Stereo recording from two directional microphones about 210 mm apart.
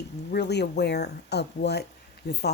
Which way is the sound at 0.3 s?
50° left (ahead or behind).